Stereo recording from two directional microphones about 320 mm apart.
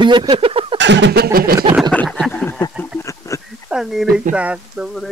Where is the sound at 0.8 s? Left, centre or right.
Right.